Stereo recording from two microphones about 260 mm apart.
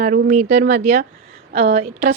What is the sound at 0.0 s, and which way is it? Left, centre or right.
A woman's voice, right.